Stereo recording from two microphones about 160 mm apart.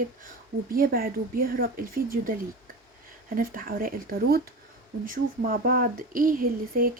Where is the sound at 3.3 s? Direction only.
60° right (ahead or behind).